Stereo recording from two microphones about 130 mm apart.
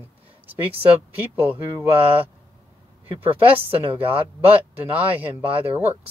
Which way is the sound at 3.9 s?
15° right (ahead or behind).